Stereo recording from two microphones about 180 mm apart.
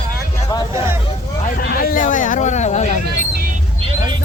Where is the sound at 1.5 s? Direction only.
55° left (ahead or behind).